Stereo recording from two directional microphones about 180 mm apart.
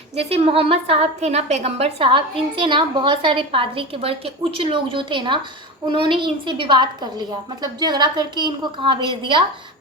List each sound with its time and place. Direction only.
0.2 s a woman's voice: 35° right (ahead or behind)